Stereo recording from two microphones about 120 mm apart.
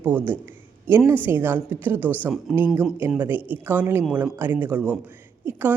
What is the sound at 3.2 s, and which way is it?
A woman's voice, 15° right (ahead or behind).